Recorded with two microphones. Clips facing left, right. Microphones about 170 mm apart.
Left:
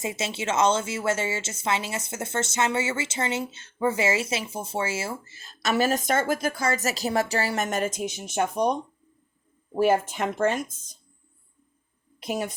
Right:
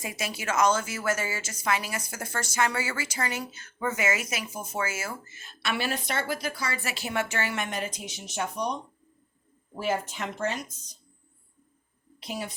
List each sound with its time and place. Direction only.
0.0 s a woman's voice: 25° left (ahead or behind); by 10.9 s 50° left (ahead or behind)
12.2 s speech: 50° left (ahead or behind)